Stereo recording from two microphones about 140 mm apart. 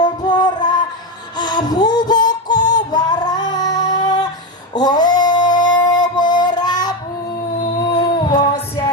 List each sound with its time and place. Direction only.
0.0 s music: 30° left (ahead or behind)
4.7 s singing: 30° left (ahead or behind)
7.9 s music: 40° left (ahead or behind)